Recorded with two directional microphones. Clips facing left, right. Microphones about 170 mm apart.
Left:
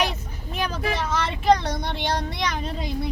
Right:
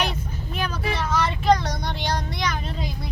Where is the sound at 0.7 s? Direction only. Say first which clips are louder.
Right 1 dB; 30° left (ahead or behind).